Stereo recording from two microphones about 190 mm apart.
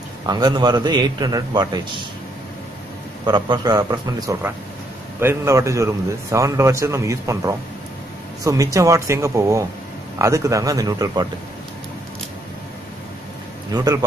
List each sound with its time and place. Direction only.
0.3 s a man's voice: 20° right (ahead or behind)
3.3 s a man's voice: 20° right (ahead or behind)
13.7 s a man's voice: 20° right (ahead or behind)